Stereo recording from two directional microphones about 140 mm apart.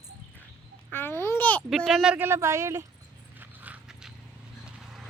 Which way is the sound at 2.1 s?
15° right (ahead or behind).